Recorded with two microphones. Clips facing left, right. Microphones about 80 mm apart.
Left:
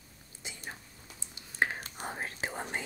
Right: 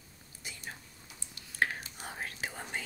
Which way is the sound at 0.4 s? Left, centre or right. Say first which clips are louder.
Left 1 dB; left.